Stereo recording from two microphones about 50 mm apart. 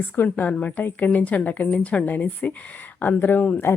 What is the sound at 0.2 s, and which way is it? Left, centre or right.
A woman's voice, left.